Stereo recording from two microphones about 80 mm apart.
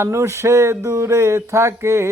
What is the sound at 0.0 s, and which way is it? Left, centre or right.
Speech, right.